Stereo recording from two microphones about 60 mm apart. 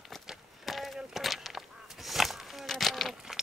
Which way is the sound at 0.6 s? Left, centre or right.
Centre.